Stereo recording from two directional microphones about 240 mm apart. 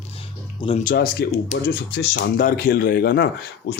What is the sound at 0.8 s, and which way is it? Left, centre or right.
Speech, left.